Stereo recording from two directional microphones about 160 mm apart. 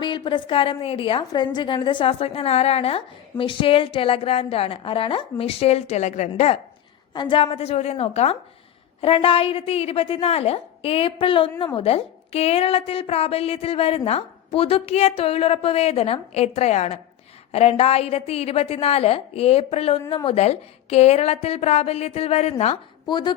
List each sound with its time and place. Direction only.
0.0 s a woman's voice: 30° left (ahead or behind); by 6.6 s 45° left (ahead or behind)
7.1 s a woman's voice: 30° left (ahead or behind)
23.0 s speech: 30° left (ahead or behind)